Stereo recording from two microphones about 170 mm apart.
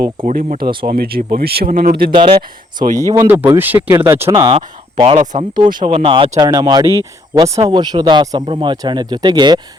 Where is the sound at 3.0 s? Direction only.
15° right (ahead or behind).